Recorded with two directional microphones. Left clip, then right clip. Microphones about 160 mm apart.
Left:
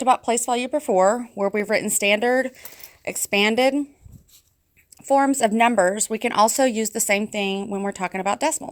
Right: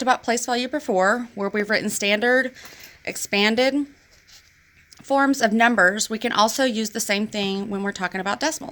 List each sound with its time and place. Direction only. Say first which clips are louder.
0.0 s speech: left 2 dB; 35° left (ahead or behind)
5.0 s speech: left 1 dB; 35° left (ahead or behind)